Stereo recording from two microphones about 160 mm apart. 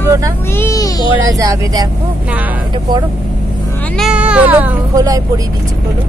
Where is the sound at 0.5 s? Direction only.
20° left (ahead or behind).